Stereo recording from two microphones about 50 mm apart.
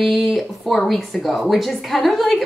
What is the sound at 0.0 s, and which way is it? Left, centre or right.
Speech, centre.